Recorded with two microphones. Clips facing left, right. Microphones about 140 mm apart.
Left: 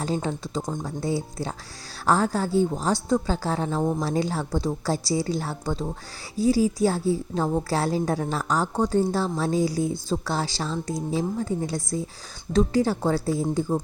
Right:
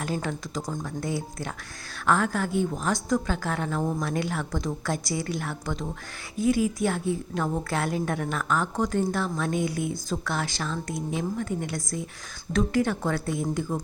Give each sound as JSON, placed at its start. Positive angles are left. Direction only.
{"t": 0.0, "sound": "a woman's voice", "side_deg": 30}